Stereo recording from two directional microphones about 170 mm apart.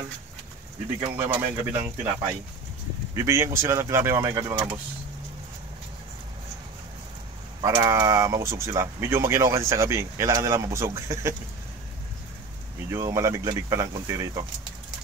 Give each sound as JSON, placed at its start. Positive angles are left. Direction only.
{"t": 1.1, "sound": "speech", "side_deg": -15}
{"t": 3.2, "sound": "speech", "side_deg": -15}
{"t": 7.6, "sound": "speech", "side_deg": -20}
{"t": 12.9, "sound": "speech", "side_deg": -15}